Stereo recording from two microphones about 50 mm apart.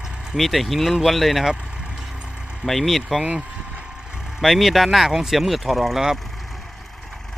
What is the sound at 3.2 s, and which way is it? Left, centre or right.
Speech, right.